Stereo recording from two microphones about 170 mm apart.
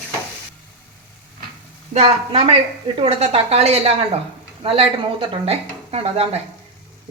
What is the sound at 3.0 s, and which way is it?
A woman's voice, 35° right (ahead or behind).